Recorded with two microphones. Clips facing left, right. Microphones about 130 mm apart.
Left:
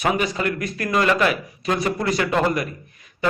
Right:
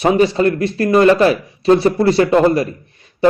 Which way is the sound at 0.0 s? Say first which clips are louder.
Right 9 dB; 30° right (ahead or behind).